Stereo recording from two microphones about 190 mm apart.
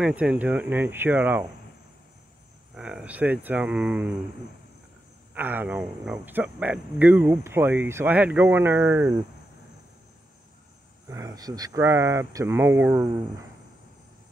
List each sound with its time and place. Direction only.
0.0 s speech: 5° right (ahead or behind)
2.7 s speech: 5° right (ahead or behind)
5.3 s speech: 10° right (ahead or behind)
11.1 s speech: 20° right (ahead or behind)